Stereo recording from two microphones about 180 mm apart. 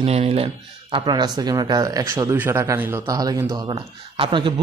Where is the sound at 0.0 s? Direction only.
35° right (ahead or behind).